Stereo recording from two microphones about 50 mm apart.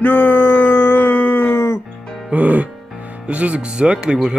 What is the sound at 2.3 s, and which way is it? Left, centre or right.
Music, right.